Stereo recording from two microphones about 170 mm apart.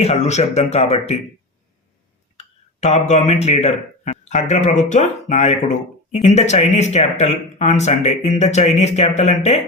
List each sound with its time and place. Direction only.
0.0 s speech: 40° left (ahead or behind)
2.4 s speech: 40° left (ahead or behind)